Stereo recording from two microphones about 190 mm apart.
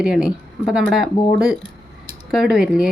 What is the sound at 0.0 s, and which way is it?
Speech, 5° right (ahead or behind).